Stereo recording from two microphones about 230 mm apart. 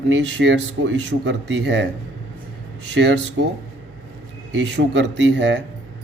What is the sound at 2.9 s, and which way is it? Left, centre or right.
Speech, right.